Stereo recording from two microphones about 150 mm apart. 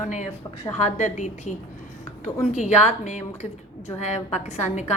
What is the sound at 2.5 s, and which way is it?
A woman's voice, 50° left (ahead or behind).